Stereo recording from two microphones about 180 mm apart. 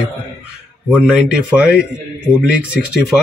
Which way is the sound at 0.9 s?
5° right (ahead or behind).